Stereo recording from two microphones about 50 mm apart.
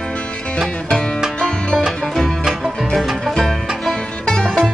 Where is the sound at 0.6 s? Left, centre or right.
Centre.